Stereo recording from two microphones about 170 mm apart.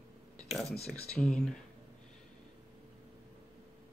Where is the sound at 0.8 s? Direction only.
5° left (ahead or behind).